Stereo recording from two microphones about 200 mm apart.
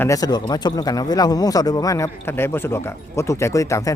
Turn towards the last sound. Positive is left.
turn(degrees=15)  # may be behind; listen again after turning